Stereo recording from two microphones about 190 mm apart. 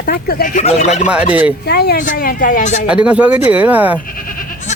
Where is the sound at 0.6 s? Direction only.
35° left (ahead or behind).